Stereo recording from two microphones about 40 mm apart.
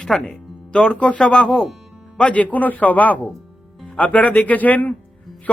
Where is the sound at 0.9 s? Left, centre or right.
Left.